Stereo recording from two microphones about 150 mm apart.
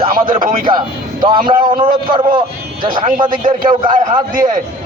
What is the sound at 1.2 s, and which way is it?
Speech, 30° right (ahead or behind).